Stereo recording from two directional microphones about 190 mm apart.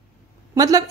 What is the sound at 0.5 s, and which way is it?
Speech, 20° right (ahead or behind).